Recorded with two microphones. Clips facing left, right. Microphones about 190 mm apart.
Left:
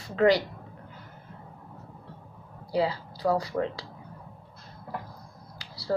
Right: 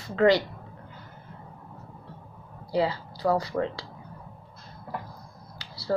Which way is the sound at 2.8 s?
10° left (ahead or behind).